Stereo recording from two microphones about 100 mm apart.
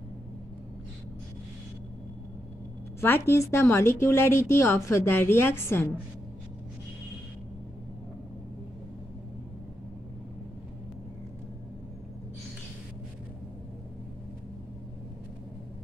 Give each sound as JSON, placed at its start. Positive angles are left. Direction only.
{"t": 3.0, "sound": "speech", "side_deg": 25}